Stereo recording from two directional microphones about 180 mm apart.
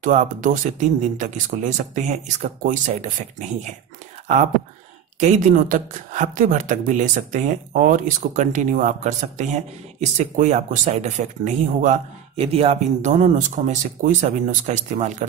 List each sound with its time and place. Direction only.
0.0 s a woman's voice: 45° right (ahead or behind)
5.2 s a woman's voice: 45° right (ahead or behind)